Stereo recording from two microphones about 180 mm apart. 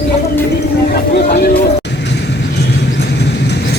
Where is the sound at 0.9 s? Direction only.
60° left (ahead or behind).